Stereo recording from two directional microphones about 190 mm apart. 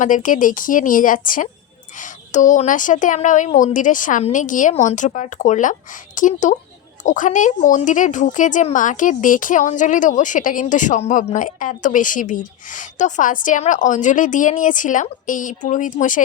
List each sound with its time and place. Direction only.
0.0 s a woman's voice: 45° left (ahead or behind)